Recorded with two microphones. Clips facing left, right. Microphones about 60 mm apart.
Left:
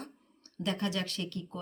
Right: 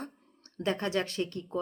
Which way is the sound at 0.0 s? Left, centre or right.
Right.